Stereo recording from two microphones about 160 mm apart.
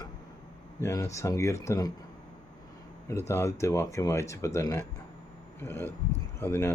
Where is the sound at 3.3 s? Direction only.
20° left (ahead or behind).